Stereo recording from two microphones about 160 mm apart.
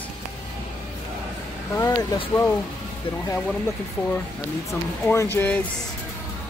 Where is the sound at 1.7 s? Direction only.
20° left (ahead or behind).